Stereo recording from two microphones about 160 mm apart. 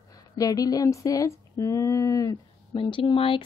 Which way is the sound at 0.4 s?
20° left (ahead or behind).